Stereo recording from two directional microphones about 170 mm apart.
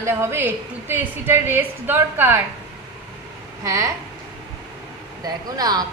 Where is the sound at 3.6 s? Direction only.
20° right (ahead or behind).